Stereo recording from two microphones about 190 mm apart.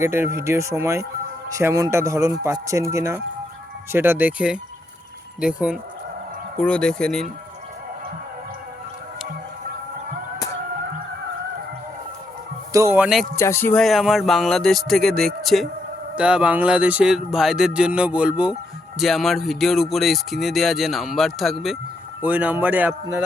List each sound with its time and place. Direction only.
0.0 s speech: 15° right (ahead or behind); by 7.3 s 5° left (ahead or behind)
12.7 s speech: 15° right (ahead or behind)
13.3 s speech: 15° left (ahead or behind); by 23.0 s 10° right (ahead or behind)